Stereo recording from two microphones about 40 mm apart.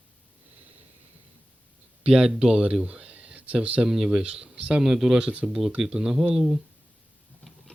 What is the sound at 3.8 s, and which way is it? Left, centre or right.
Speech, centre.